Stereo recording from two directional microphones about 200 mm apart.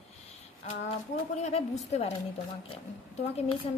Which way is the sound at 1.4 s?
30° left (ahead or behind).